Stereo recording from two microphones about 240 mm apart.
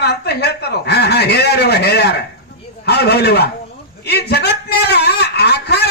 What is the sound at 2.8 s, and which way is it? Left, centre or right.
Speech, left.